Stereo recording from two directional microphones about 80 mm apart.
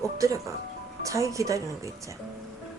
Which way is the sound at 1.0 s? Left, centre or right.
Right.